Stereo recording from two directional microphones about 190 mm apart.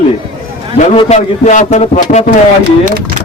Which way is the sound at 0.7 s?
40° left (ahead or behind).